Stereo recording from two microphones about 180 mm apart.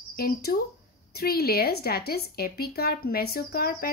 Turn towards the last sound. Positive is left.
turn(degrees=55)  # may be behind; listen again after turning